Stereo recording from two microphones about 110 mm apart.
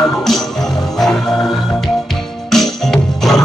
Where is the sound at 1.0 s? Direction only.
Centre (ahead or behind).